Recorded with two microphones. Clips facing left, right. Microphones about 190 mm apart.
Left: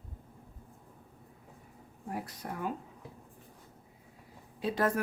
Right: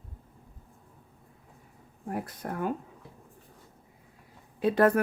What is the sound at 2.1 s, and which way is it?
Speech, 55° right (ahead or behind).